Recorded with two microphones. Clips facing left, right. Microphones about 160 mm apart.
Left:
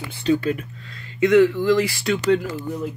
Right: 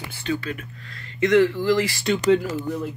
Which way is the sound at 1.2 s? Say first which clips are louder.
Left 3 dB; 5° left (ahead or behind).